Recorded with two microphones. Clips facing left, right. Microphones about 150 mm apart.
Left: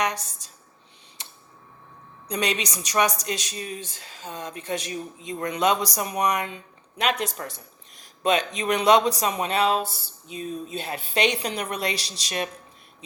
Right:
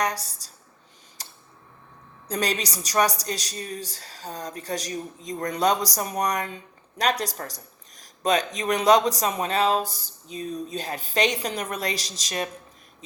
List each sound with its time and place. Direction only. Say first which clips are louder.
0.0 s a woman's voice: even; 35° right (ahead or behind)
1.2 s tick: right 1 dB; 40° right (ahead or behind)
2.3 s speech: even; 40° right (ahead or behind)